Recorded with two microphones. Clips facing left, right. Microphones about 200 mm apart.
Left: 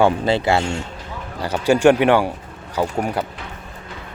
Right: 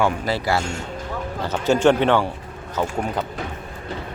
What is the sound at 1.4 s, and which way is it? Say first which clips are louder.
A man's voice: left 3 dB; 10° left (ahead or behind).